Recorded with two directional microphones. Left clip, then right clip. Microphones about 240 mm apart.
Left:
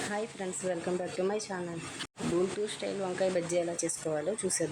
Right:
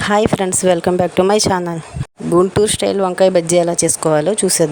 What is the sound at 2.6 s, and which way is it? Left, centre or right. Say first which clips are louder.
Speech: right 19 dB; right.